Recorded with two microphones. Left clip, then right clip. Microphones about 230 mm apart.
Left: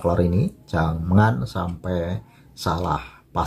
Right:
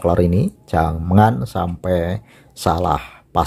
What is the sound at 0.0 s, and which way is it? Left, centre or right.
Speech, right.